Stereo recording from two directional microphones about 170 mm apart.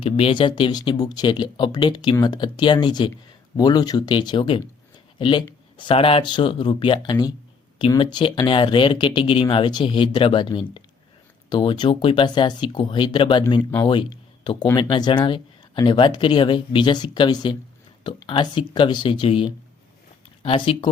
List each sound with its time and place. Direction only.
0.0 s speech: 35° left (ahead or behind)
13.6 s speech: 10° left (ahead or behind)
13.8 s speech: 30° left (ahead or behind)